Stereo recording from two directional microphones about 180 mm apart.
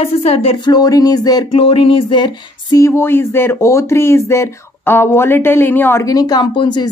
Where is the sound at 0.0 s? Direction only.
35° left (ahead or behind).